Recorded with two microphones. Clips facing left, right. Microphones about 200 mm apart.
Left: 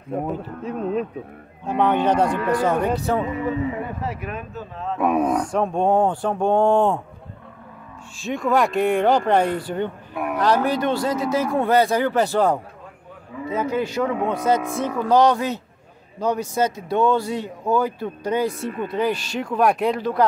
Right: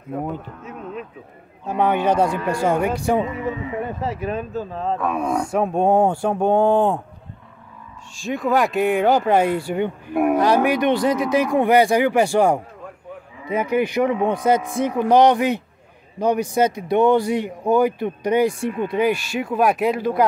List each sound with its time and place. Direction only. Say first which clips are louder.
0.1 s speech: left 1 dB; 35° left (ahead or behind)
1.8 s speech: even; 10° right (ahead or behind)
4.2 s speech: right 6 dB; 30° right (ahead or behind)
5.2 s speech: even; 10° right (ahead or behind)
8.2 s speech: right 1 dB; centre (ahead or behind)